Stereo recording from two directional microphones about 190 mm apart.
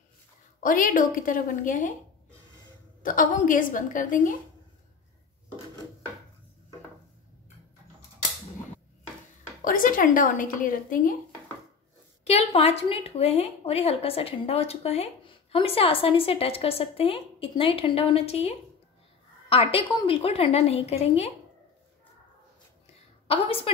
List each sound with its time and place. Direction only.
0.6 s a woman's voice: 45° left (ahead or behind)
3.0 s a woman's voice: 45° left (ahead or behind)
9.7 s a woman's voice: 45° left (ahead or behind)
12.3 s a woman's voice: 35° left (ahead or behind)
19.5 s a woman's voice: 30° left (ahead or behind)
23.2 s a woman's voice: 30° left (ahead or behind)